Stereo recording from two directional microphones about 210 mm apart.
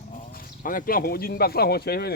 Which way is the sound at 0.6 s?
40° left (ahead or behind).